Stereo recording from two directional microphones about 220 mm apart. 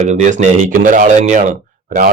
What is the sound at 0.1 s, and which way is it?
A man's voice, 35° right (ahead or behind).